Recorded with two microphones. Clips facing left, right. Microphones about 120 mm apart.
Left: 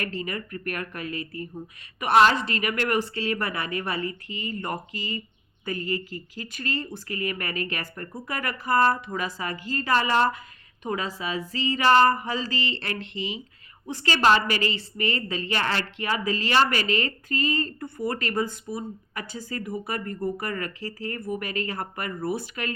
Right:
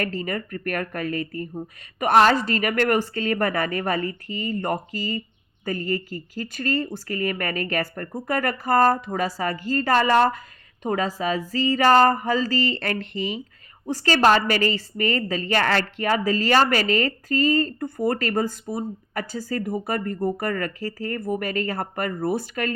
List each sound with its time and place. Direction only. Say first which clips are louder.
0.0 s a woman's voice: right 4 dB; 40° right (ahead or behind)